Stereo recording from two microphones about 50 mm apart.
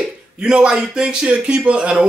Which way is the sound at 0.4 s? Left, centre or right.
Centre.